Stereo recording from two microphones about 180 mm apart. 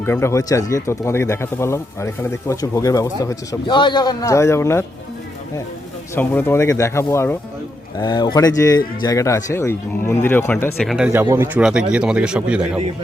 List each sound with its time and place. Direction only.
0.0 s speech: 15° left (ahead or behind)
6.1 s speech: 10° left (ahead or behind)
10.8 s speech: centre (ahead or behind)